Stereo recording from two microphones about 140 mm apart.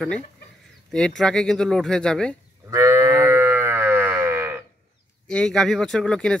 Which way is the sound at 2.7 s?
20° right (ahead or behind).